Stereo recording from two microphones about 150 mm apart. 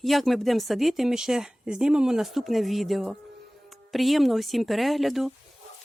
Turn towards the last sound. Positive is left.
turn(degrees=0)  # may be behind; listen again after turning